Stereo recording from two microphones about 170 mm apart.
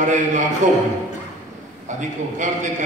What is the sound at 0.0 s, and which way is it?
Speech, 45° right (ahead or behind).